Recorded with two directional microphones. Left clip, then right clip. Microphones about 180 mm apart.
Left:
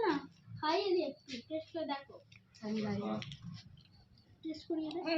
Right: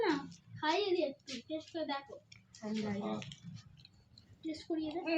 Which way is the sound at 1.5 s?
Centre (ahead or behind).